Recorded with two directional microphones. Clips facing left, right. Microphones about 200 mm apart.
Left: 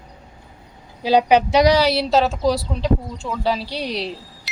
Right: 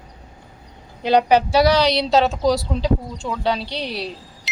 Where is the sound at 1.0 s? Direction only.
5° left (ahead or behind).